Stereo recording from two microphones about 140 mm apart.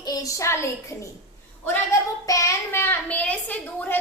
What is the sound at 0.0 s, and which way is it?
A woman's voice, 25° left (ahead or behind).